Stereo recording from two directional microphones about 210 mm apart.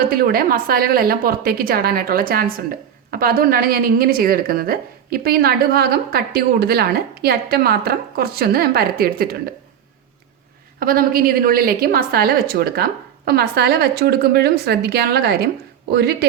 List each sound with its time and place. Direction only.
0.1 s a woman's voice: 45° right (ahead or behind)
10.8 s a woman's voice: 45° right (ahead or behind)